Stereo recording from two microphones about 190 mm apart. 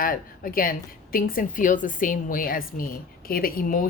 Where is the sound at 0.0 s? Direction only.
50° left (ahead or behind).